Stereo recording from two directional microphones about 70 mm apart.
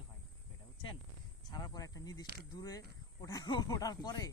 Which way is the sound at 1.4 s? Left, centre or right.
Left.